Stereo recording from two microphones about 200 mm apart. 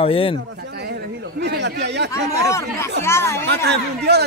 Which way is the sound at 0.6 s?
55° right (ahead or behind).